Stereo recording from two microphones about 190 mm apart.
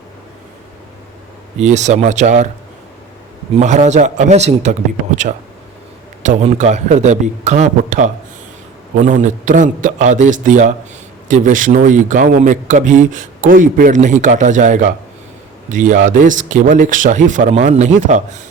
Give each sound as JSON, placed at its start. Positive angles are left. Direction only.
{"t": 1.5, "sound": "a man's voice", "side_deg": -40}
{"t": 3.6, "sound": "a man's voice", "side_deg": -40}